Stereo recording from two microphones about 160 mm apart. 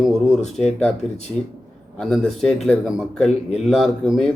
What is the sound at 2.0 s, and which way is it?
Speech, centre (ahead or behind).